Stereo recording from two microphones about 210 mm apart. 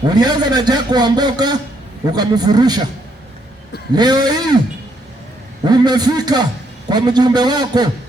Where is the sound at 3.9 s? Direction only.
20° right (ahead or behind).